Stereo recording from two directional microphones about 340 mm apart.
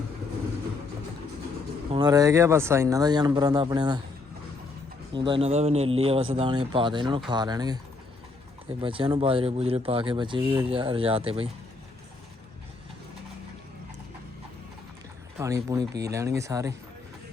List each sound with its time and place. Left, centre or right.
1.9 s speech: centre
5.1 s speech: centre
8.8 s speech: centre
15.4 s speech: centre